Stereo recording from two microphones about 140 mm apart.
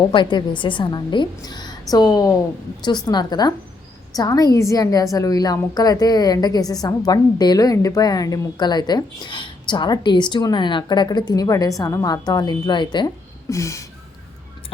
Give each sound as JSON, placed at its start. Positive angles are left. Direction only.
{"t": 0.0, "sound": "a woman's voice", "side_deg": 35}
{"t": 13.5, "sound": "a woman's voice", "side_deg": 20}